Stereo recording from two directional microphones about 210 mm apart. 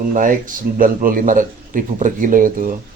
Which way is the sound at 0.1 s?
40° right (ahead or behind).